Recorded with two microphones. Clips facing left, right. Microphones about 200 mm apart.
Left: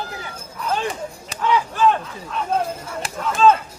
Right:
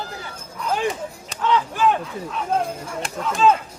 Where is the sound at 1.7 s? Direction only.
15° right (ahead or behind).